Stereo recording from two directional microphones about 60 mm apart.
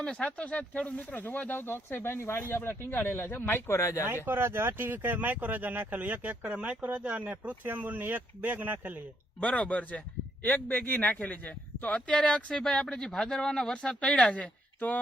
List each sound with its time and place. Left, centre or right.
0.0 s speech: centre; by 3.6 s left
3.7 s speech: left
4.0 s speech: right
9.4 s a man's voice: left
14.3 s a woman's voice: left